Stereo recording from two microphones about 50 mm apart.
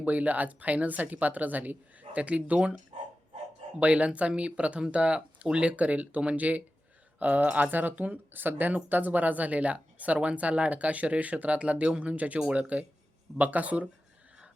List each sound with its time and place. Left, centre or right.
0.0 s speech: right
3.8 s speech: right